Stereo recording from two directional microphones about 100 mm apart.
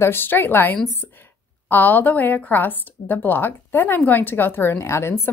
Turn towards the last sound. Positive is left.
turn(degrees=25)  # may be behind; listen again after turning